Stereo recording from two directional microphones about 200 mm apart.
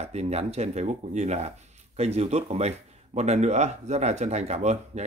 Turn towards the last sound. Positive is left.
turn(degrees=-35)  # may be behind; listen again after turning